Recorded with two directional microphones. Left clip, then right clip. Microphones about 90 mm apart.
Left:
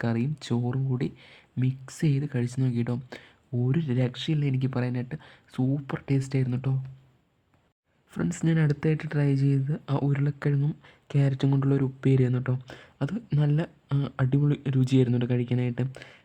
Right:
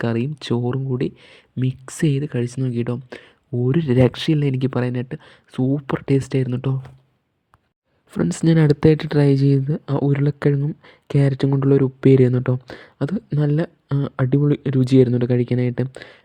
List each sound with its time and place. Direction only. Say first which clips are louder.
0.0 s speech: right 7 dB; 35° right (ahead or behind)
1.6 s speech: right 8 dB; 40° right (ahead or behind); by 3.7 s 25° right (ahead or behind)
3.7 s speech: right 11 dB; 50° right (ahead or behind)
3.9 s speech: right 12 dB; 85° right; by 5.7 s 25° right (ahead or behind)
5.7 s speech: right 10 dB; 45° right (ahead or behind)
8.1 s speech: right 9 dB; 50° right (ahead or behind)
8.5 s speech: right 15 dB; 65° right (ahead or behind)
12.6 s speech: right 8 dB; 40° right (ahead or behind)